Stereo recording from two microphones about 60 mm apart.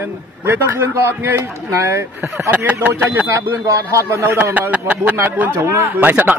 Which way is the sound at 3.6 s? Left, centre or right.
Right.